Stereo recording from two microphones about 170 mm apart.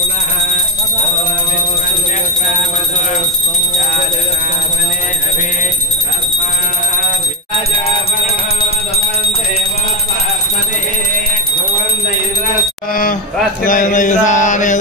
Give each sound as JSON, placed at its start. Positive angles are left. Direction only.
{"t": 13.7, "sound": "mantra", "side_deg": 50}